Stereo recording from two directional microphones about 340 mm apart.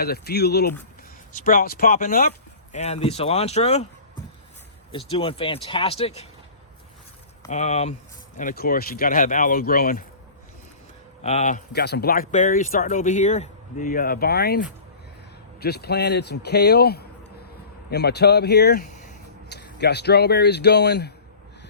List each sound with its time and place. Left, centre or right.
0.0 s speech: left
4.9 s speech: centre
7.4 s speech: centre
11.2 s speech: centre
15.6 s speech: left